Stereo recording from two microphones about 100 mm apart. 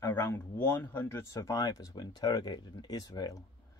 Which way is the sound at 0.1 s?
20° left (ahead or behind).